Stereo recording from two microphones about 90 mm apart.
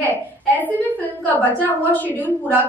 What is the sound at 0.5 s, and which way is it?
A woman's voice, 20° left (ahead or behind).